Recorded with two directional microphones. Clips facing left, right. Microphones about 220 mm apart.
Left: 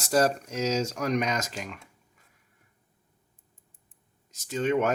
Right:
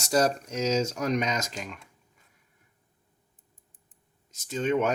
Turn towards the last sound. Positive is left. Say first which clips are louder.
# even
turn(degrees=5)  # may be behind; listen again after turning